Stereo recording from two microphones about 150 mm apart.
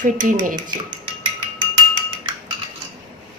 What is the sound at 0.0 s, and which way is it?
Speech, 60° right (ahead or behind).